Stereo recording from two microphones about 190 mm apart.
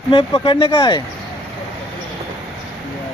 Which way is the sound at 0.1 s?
30° left (ahead or behind).